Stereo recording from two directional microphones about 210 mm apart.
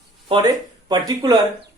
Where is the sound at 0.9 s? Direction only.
20° right (ahead or behind).